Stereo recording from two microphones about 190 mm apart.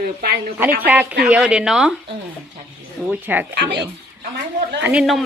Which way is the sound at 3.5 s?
65° right (ahead or behind).